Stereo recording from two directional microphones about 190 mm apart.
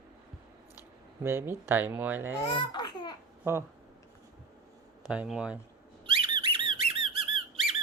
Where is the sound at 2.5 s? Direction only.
25° left (ahead or behind).